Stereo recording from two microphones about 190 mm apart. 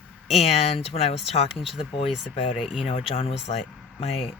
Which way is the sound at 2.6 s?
Centre (ahead or behind).